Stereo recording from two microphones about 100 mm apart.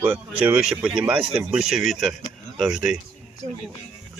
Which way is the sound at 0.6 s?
5° right (ahead or behind).